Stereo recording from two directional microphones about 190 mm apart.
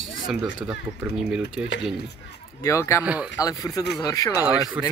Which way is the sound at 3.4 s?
20° left (ahead or behind).